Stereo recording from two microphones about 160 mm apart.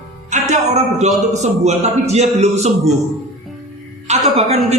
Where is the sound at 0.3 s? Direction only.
45° right (ahead or behind).